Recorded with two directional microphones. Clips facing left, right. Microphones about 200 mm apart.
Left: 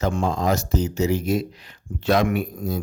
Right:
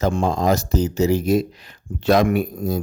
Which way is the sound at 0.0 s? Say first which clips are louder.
Right 3 dB; 35° right (ahead or behind).